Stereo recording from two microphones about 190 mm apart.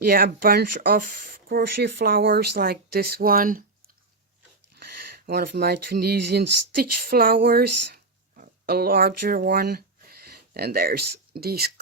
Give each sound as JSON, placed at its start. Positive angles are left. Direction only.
{"t": 0.0, "sound": "speech", "side_deg": -50}
{"t": 4.7, "sound": "speech", "side_deg": -60}